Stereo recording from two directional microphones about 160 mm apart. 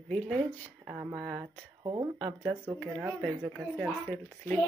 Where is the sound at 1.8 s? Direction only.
25° right (ahead or behind).